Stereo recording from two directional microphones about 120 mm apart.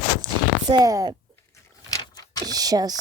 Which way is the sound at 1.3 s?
25° left (ahead or behind).